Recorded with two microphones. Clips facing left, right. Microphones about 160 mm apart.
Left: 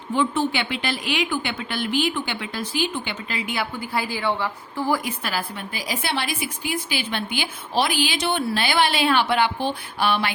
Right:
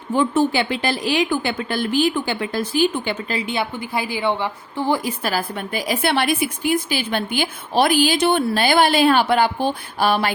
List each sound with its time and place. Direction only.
0.2 s a woman's voice: 40° right (ahead or behind)
3.4 s a woman's voice: 25° right (ahead or behind)
5.0 s a woman's voice: 40° right (ahead or behind)